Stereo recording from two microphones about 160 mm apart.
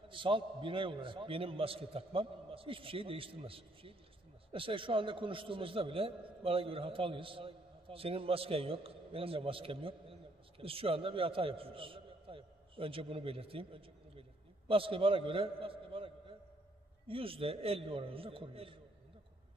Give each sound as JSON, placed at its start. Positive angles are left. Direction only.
{"t": 0.1, "sound": "a man's voice", "side_deg": -30}